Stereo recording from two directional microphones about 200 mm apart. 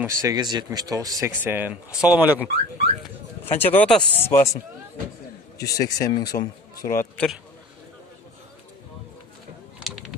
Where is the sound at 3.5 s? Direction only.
10° left (ahead or behind).